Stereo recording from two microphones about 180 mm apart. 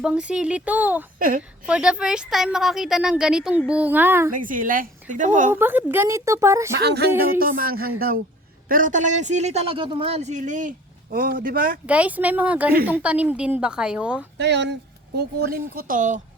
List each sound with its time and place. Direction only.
0.0 s a woman's voice: 5° right (ahead or behind)
4.3 s speech: 50° right (ahead or behind)
5.5 s a woman's voice: 10° right (ahead or behind)
6.8 s a woman's voice: 65° right (ahead or behind)
7.3 s speech: 50° right (ahead or behind)
11.9 s a woman's voice: 10° right (ahead or behind)
14.3 s a woman's voice: 75° right (ahead or behind); by 16.2 s 45° right (ahead or behind)